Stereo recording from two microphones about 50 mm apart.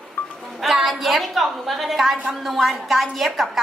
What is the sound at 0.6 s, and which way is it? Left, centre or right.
A woman's voice, centre.